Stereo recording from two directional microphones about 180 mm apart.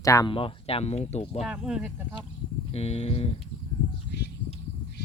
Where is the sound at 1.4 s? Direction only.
5° right (ahead or behind).